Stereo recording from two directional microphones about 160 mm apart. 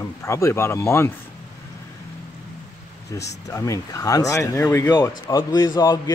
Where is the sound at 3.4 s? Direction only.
20° left (ahead or behind).